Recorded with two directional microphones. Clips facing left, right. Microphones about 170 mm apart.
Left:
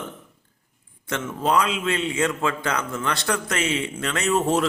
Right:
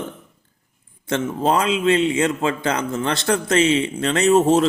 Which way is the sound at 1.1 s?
30° right (ahead or behind).